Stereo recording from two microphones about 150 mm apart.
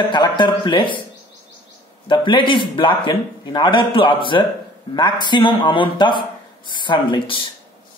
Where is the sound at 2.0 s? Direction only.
35° left (ahead or behind).